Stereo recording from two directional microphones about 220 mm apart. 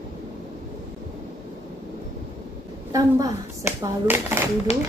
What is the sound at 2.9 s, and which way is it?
Speech, 15° right (ahead or behind).